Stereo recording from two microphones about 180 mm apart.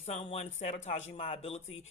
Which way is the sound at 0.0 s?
40° left (ahead or behind).